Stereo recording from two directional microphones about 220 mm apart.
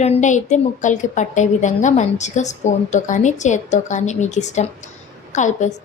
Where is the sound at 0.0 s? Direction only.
30° left (ahead or behind).